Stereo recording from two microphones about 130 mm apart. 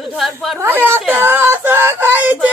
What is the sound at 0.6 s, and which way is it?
Speech, 15° right (ahead or behind).